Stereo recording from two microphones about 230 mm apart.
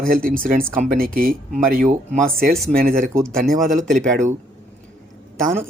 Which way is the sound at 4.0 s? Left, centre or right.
Right.